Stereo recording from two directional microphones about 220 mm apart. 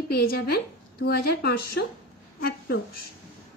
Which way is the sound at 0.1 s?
45° left (ahead or behind).